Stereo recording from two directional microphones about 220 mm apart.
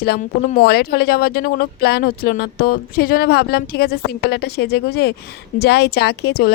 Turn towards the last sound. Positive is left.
turn(degrees=45)  # may be behind; listen again after turning